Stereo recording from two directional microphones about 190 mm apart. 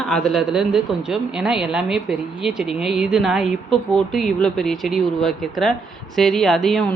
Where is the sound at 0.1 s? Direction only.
Centre (ahead or behind).